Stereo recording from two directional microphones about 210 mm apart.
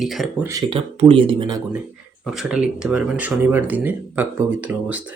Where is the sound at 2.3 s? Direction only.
Centre (ahead or behind).